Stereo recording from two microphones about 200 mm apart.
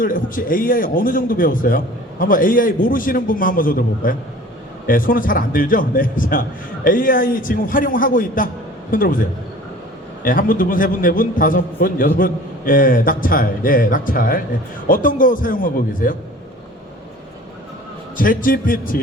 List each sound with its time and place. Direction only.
0.0 s a man's voice: 45° left (ahead or behind)
10.2 s a man's voice: 45° left (ahead or behind)
18.2 s a man's voice: 45° left (ahead or behind)